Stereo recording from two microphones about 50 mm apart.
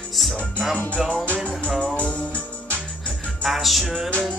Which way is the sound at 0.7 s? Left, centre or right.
Left.